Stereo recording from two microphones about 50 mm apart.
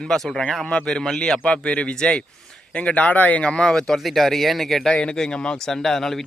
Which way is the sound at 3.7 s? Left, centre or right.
Centre.